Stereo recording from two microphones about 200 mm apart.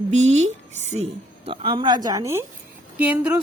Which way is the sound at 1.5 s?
25° right (ahead or behind).